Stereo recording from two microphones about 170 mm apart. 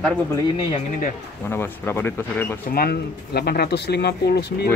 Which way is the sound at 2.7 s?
65° left (ahead or behind).